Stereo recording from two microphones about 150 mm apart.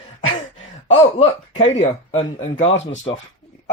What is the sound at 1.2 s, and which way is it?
Speech, 40° left (ahead or behind).